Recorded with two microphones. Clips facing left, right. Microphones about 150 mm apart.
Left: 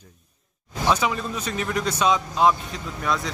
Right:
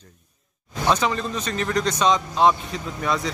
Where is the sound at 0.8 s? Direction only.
10° left (ahead or behind).